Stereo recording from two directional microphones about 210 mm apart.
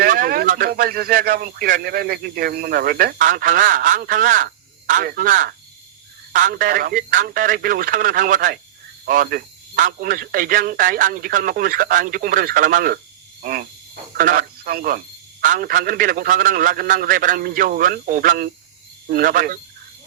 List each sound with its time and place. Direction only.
0.0 s speech: 45° right (ahead or behind)
13.4 s frog: 45° right (ahead or behind)
14.2 s speech: 40° right (ahead or behind)